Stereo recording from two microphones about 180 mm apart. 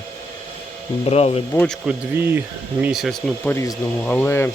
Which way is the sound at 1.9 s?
10° right (ahead or behind).